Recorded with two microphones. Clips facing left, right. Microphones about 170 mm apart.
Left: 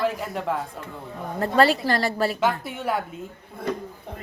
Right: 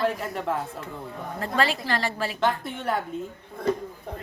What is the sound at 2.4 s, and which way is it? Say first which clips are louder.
Speech: left 1 dB; 5° left (ahead or behind).